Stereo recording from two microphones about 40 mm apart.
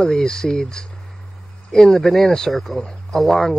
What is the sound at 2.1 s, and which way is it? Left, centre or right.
Speech, centre.